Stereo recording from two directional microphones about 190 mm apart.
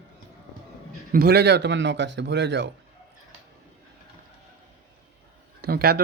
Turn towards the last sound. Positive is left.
turn(degrees=-55)  # may be behind; listen again after turning